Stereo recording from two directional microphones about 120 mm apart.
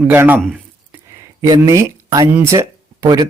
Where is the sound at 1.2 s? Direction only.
25° right (ahead or behind).